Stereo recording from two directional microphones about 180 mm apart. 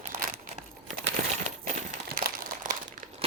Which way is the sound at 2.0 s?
55° right (ahead or behind).